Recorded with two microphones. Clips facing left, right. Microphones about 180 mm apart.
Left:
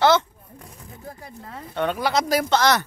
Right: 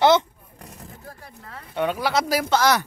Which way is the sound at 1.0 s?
15° left (ahead or behind).